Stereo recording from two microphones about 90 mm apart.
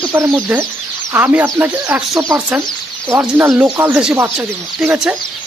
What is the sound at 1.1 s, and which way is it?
Speech, 20° right (ahead or behind).